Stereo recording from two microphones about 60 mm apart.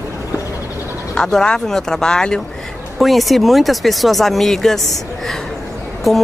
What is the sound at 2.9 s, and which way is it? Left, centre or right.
Speech, centre.